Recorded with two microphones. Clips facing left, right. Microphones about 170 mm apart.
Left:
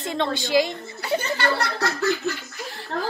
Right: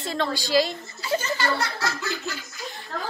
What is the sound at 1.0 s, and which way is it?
A woman's voice, 60° left (ahead or behind).